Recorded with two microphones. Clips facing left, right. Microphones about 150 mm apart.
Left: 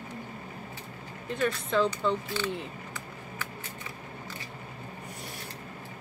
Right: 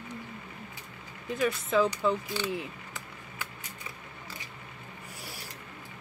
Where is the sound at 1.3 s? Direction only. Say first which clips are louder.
Right 1 dB; 5° right (ahead or behind).